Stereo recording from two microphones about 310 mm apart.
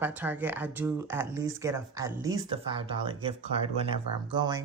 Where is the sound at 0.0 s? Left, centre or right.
Centre.